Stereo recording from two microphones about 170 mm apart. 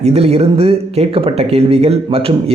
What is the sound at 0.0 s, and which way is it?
Speech, 40° right (ahead or behind).